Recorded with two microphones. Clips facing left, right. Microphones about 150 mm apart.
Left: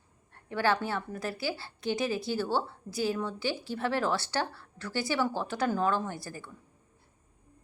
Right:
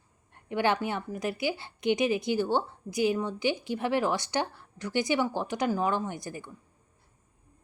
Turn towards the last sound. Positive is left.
turn(degrees=-15)  # may be behind; listen again after turning